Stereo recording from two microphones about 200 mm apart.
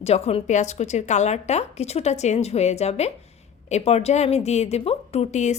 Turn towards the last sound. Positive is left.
turn(degrees=35)  # may be behind; listen again after turning